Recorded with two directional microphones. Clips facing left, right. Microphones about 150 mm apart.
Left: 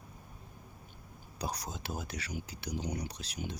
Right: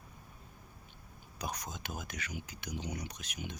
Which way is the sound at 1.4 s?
35° left (ahead or behind).